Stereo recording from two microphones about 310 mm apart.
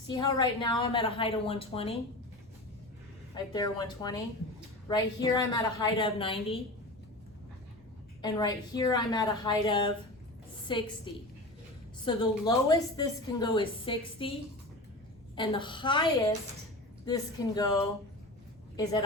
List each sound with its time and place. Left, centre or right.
0.1 s a woman's voice: centre
3.3 s a woman's voice: centre
8.2 s a woman's voice: centre
15.4 s a woman's voice: centre